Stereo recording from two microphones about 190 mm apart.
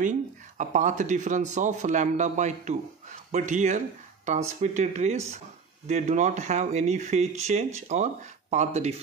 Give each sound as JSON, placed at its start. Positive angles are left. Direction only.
{"t": 0.6, "sound": "speech", "side_deg": -40}